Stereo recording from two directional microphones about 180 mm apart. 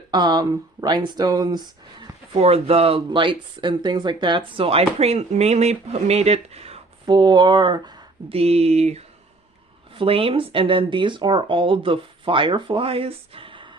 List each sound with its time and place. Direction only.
0.1 s speech: 25° right (ahead or behind)
2.0 s speech: 35° right (ahead or behind)
7.0 s speech: 25° right (ahead or behind)